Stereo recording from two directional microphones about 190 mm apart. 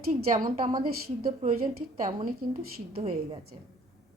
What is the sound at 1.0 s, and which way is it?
Speech, 50° right (ahead or behind).